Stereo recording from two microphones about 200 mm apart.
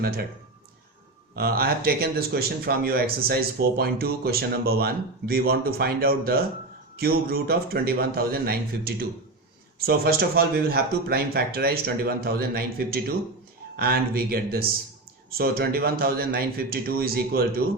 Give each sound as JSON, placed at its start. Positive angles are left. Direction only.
{"t": 1.4, "sound": "speech", "side_deg": -50}